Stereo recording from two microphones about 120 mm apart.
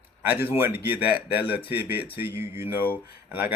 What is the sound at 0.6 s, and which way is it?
Speech, 20° right (ahead or behind).